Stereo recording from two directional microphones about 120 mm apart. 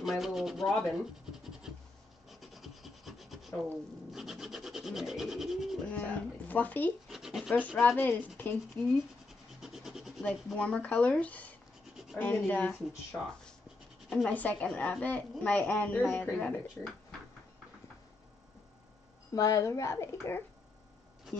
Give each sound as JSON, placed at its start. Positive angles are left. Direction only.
{"t": 0.0, "sound": "rub", "side_deg": 0}
{"t": 2.2, "sound": "rub", "side_deg": 0}
{"t": 5.9, "sound": "a woman's voice", "side_deg": 15}
{"t": 7.1, "sound": "rub", "side_deg": -5}
{"t": 7.8, "sound": "a woman's voice", "side_deg": 15}
{"t": 9.6, "sound": "rub", "side_deg": -5}
{"t": 10.2, "sound": "a woman's voice", "side_deg": 10}
{"t": 19.3, "sound": "speech", "side_deg": 30}